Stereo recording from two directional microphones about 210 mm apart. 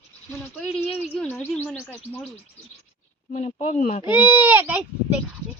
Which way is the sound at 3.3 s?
35° left (ahead or behind).